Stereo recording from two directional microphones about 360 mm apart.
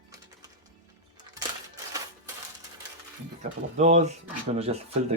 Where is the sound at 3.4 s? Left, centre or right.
Centre.